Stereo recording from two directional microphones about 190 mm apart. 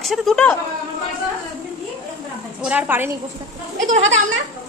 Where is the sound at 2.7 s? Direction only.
10° right (ahead or behind).